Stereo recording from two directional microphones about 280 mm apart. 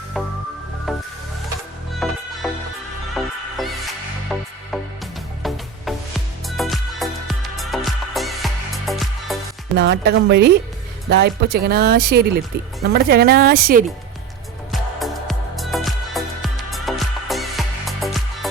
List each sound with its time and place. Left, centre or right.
0.9 s music: centre
9.7 s speech: right
14.7 s music: centre